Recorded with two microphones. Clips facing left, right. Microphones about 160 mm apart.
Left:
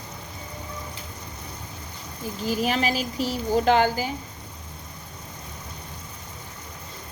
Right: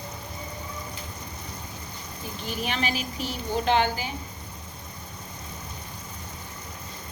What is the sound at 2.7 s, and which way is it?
A woman's voice, 35° left (ahead or behind).